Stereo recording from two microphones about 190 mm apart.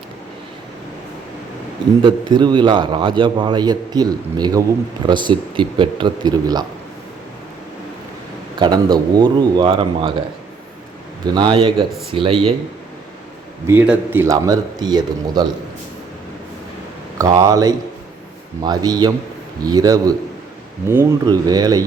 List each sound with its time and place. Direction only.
2.0 s a man's voice: 25° right (ahead or behind)
8.5 s a man's voice: 20° right (ahead or behind)
11.3 s a man's voice: 25° right (ahead or behind)
13.7 s speech: 10° right (ahead or behind)
17.2 s a man's voice: 15° right (ahead or behind)